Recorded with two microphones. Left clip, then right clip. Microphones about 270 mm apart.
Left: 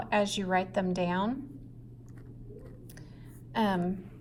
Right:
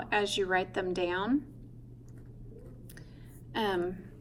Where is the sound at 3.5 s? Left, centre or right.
Left.